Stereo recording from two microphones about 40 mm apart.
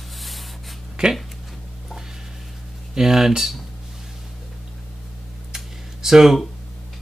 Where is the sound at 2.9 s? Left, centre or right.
Centre.